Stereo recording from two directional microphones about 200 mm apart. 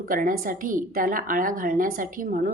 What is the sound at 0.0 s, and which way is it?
Speech, 45° right (ahead or behind).